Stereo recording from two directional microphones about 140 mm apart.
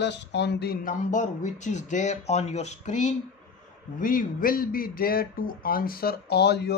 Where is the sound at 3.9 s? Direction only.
75° left (ahead or behind).